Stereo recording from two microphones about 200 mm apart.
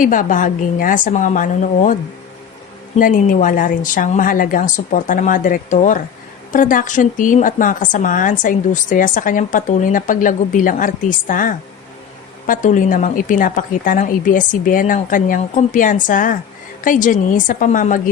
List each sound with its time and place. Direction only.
0.0 s a woman's voice: 40° left (ahead or behind)
3.0 s a woman's voice: 40° left (ahead or behind)